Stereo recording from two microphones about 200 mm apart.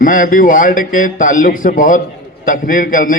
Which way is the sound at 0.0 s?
40° left (ahead or behind).